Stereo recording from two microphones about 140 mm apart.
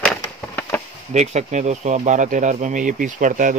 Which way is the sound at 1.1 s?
55° right (ahead or behind).